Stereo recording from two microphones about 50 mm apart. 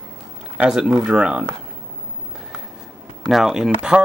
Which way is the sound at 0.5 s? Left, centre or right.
Centre.